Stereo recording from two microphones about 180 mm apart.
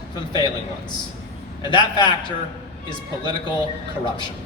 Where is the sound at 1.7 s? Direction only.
25° left (ahead or behind).